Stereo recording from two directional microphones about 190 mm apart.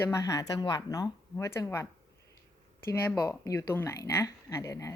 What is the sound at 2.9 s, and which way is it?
Speech, 15° left (ahead or behind).